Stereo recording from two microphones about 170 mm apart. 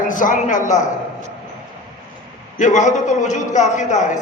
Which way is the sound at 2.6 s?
45° left (ahead or behind).